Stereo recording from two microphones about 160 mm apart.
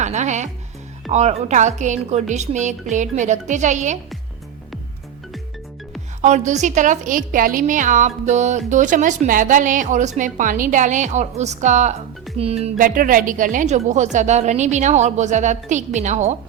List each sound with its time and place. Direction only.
0.0 s a woman's voice: 45° right (ahead or behind)
6.2 s a woman's voice: 50° right (ahead or behind)
12.7 s a woman's voice: 60° right (ahead or behind)